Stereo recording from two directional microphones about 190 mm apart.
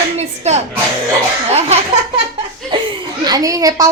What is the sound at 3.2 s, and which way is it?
Speech, 20° right (ahead or behind).